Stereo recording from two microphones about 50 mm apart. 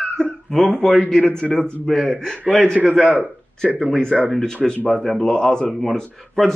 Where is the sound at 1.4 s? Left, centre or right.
Centre.